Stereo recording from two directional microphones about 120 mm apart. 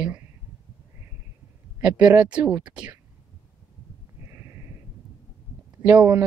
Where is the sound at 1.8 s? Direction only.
10° right (ahead or behind).